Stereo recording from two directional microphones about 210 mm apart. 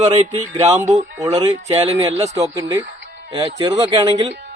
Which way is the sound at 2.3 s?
15° right (ahead or behind).